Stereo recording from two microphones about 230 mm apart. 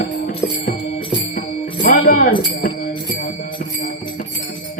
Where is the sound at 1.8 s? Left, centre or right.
Left.